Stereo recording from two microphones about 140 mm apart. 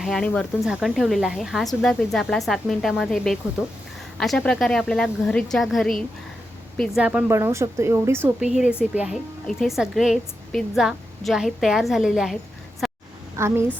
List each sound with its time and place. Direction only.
0.0 s a woman's voice: centre (ahead or behind)
7.0 s a woman's voice: 10° right (ahead or behind)
8.8 s a woman's voice: 5° right (ahead or behind)
12.8 s a sound: centre (ahead or behind)
13.3 s a woman's voice: 20° right (ahead or behind)